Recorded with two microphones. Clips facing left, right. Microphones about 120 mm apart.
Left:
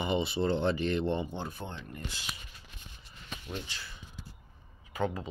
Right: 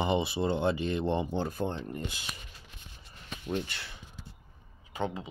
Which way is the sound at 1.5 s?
40° right (ahead or behind).